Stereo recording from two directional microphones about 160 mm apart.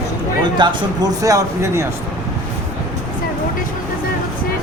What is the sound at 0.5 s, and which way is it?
A man's voice, 25° right (ahead or behind).